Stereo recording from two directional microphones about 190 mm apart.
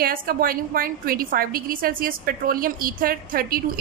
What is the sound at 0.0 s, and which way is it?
A woman's voice, 50° right (ahead or behind).